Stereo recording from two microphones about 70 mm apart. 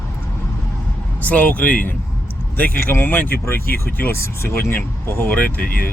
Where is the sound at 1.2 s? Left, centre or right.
Left.